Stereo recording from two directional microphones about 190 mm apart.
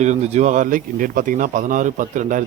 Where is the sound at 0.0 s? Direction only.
35° right (ahead or behind).